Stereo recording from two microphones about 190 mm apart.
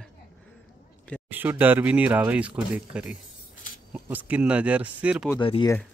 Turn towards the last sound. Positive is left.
turn(degrees=25)  # may be behind; listen again after turning